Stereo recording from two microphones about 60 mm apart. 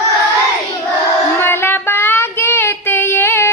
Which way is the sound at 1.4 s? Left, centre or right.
Left.